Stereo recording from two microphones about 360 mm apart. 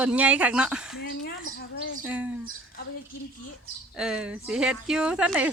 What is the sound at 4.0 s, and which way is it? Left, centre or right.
Speech, centre.